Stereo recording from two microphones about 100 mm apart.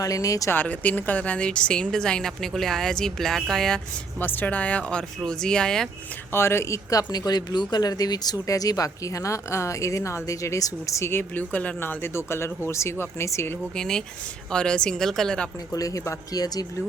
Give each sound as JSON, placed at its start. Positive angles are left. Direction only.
{"t": 0.0, "sound": "speech", "side_deg": 35}
{"t": 0.5, "sound": "speech", "side_deg": 15}
{"t": 4.2, "sound": "speech", "side_deg": 20}
{"t": 6.3, "sound": "speech", "side_deg": 25}
{"t": 13.7, "sound": "speech", "side_deg": 5}
{"t": 15.7, "sound": "speech", "side_deg": 35}